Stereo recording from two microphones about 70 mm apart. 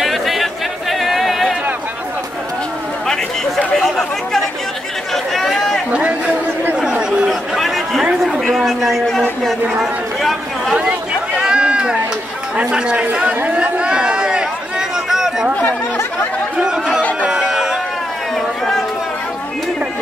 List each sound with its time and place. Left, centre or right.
0.0 s chatter: centre
3.1 s chatter: centre
5.1 s a sound: centre
5.9 s a sound: centre
6.8 s chatter: centre
7.2 s chatter: centre
10.8 s a sound: centre
12.5 s chatter: centre
15.6 s chatter: left
16.5 s chatter: centre
17.2 s music: centre